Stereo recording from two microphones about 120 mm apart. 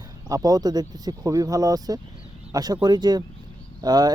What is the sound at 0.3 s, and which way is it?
Speech, 30° right (ahead or behind).